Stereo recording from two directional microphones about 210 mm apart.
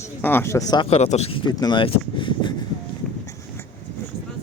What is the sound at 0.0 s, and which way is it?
Speech, 10° left (ahead or behind).